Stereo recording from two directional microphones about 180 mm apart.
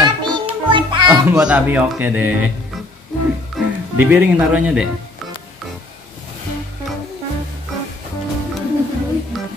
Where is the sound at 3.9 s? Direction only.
10° right (ahead or behind).